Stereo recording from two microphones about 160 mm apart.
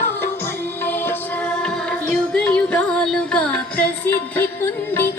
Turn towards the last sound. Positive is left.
turn(degrees=15)  # may be behind; listen again after turning